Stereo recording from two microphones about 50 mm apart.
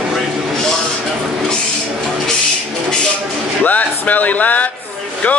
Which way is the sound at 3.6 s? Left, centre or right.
Left.